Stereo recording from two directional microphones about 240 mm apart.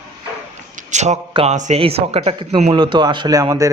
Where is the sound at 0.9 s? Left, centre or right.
Right.